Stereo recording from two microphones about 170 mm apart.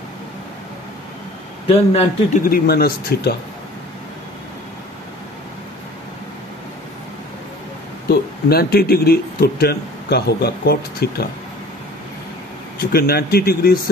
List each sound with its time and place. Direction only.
1.7 s speech: 35° left (ahead or behind)
2.5 s speech: 65° left (ahead or behind)
8.1 s speech: 65° left (ahead or behind)
12.9 s speech: 65° left (ahead or behind)